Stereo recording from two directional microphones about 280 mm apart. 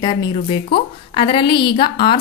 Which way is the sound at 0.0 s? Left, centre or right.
Centre.